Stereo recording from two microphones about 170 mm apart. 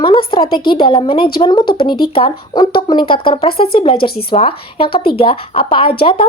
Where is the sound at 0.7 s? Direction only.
25° left (ahead or behind).